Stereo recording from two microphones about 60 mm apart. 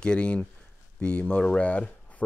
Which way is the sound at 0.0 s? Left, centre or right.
Centre.